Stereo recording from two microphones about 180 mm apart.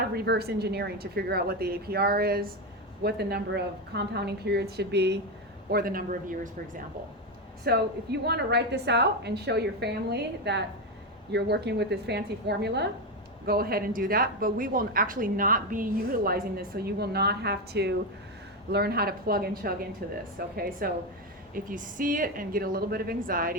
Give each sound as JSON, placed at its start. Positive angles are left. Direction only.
{"t": 0.1, "sound": "a woman's voice", "side_deg": -60}
{"t": 5.7, "sound": "speech", "side_deg": -55}
{"t": 7.6, "sound": "a woman's voice", "side_deg": -65}
{"t": 13.4, "sound": "a woman's voice", "side_deg": -55}